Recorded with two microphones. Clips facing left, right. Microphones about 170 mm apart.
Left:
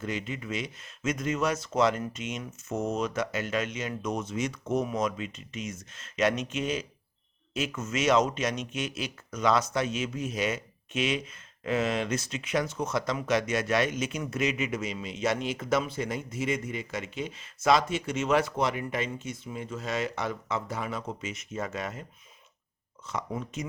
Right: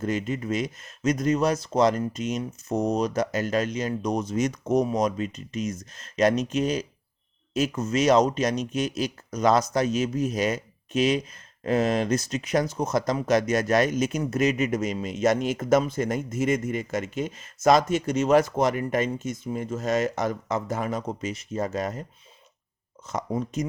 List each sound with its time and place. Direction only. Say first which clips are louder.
0.0 s speech: right 7 dB; 45° right (ahead or behind)
23.0 s speech: right 6 dB; 40° right (ahead or behind)